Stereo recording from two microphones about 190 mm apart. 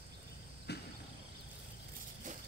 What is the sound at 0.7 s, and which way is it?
Cricket, 60° left (ahead or behind).